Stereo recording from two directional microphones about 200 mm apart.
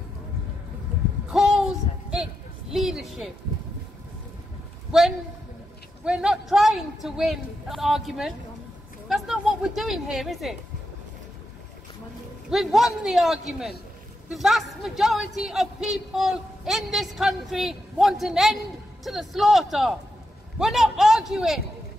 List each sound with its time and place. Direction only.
1.3 s a sound: 5° right (ahead or behind)
2.7 s speech: centre (ahead or behind)
4.9 s a man's voice: 5° right (ahead or behind)
12.4 s speech: centre (ahead or behind)